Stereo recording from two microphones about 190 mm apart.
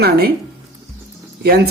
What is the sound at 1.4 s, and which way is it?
Speech, 55° right (ahead or behind).